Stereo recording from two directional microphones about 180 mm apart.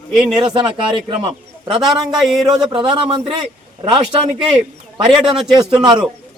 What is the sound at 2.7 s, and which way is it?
A man's voice, 25° right (ahead or behind).